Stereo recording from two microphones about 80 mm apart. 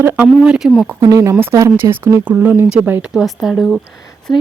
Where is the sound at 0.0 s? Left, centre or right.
Right.